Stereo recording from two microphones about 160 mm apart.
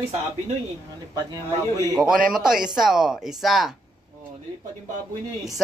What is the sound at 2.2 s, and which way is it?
Speech, 5° right (ahead or behind).